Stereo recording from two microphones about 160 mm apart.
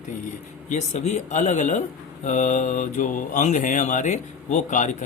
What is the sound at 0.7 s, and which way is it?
Speech, 45° left (ahead or behind).